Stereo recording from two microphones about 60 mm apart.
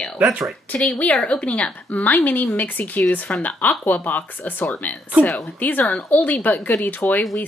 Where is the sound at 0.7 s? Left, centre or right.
Left.